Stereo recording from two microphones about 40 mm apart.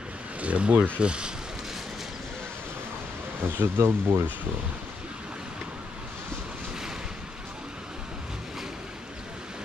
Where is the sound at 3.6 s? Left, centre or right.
Right.